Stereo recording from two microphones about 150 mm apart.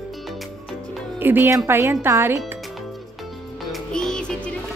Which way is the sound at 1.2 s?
15° right (ahead or behind).